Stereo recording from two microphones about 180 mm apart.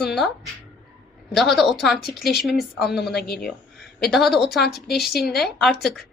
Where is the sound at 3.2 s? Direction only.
60° left (ahead or behind).